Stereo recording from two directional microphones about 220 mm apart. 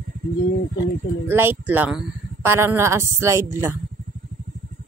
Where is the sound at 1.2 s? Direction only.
10° right (ahead or behind).